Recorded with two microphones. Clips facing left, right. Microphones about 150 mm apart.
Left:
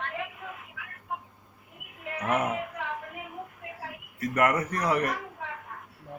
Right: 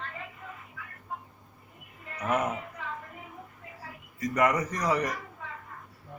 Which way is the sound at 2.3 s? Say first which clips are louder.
Left 1 dB; 10° left (ahead or behind).